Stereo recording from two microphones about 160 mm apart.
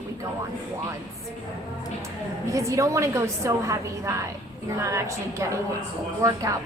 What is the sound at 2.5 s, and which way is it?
A woman's voice, 20° right (ahead or behind).